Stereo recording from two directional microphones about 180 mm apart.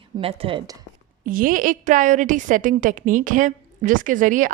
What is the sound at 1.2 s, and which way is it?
A woman's voice, 50° right (ahead or behind).